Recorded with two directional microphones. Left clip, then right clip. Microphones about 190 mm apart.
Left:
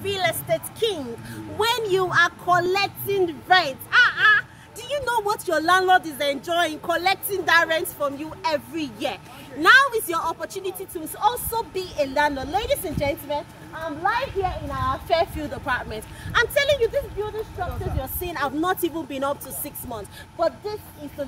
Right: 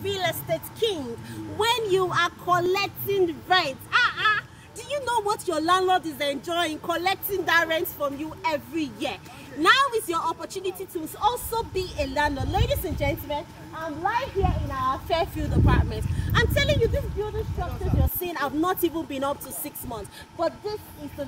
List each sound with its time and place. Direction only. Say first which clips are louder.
0.0 s a woman's voice: left 3 dB; centre (ahead or behind)